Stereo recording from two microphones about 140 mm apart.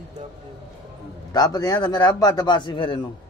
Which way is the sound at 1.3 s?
25° left (ahead or behind).